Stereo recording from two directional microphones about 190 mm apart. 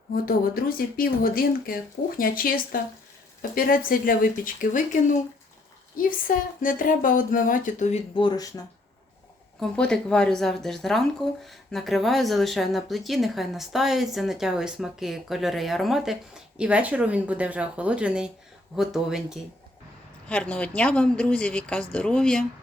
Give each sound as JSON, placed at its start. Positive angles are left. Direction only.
{"t": 0.1, "sound": "speech", "side_deg": 50}
{"t": 6.0, "sound": "speech", "side_deg": 45}
{"t": 8.2, "sound": "speech", "side_deg": 20}
{"t": 9.6, "sound": "speech", "side_deg": 5}